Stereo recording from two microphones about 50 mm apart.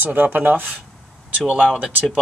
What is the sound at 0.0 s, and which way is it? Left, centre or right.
Speech, right.